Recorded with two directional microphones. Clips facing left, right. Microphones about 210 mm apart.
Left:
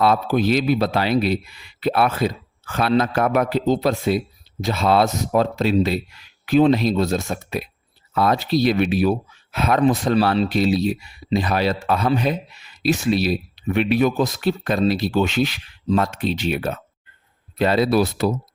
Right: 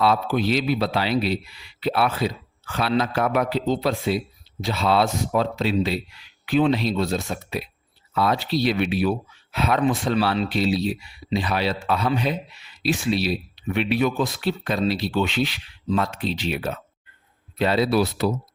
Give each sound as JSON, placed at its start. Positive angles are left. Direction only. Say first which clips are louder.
{"t": 0.0, "sound": "speech", "louder": "left 3 dB", "side_deg": 45}